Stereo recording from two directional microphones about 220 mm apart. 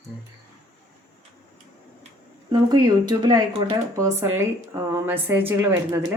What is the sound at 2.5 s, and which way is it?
Speech, 20° right (ahead or behind).